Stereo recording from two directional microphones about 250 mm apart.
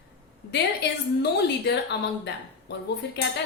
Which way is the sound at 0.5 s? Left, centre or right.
Left.